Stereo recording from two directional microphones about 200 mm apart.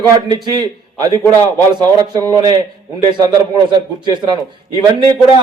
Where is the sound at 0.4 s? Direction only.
20° right (ahead or behind).